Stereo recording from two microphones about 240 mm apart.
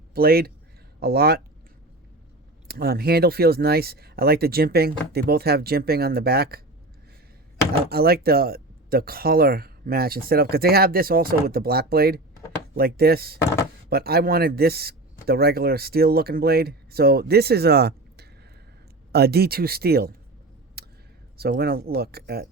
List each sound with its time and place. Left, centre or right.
0.1 s speech: right
2.6 s speech: right
7.9 s speech: right
20.8 s a sound: right
21.3 s speech: right